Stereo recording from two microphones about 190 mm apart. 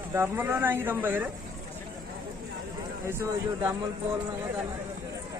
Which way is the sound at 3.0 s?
15° right (ahead or behind).